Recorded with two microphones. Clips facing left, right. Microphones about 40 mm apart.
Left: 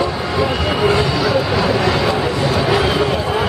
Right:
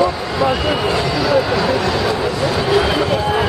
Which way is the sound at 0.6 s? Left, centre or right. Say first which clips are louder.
Left 2 dB; centre.